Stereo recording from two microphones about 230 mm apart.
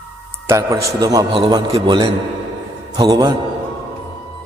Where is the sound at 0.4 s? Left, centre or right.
Centre.